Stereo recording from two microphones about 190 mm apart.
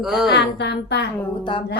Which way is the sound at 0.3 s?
65° left (ahead or behind).